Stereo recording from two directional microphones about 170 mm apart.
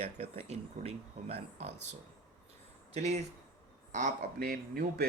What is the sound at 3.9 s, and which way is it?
Speech, 50° right (ahead or behind).